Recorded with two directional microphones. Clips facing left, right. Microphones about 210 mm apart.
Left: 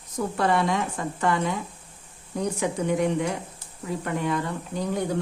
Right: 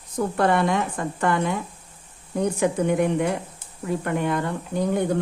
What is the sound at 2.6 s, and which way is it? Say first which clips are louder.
A woman's voice: right 3 dB; 55° right (ahead or behind).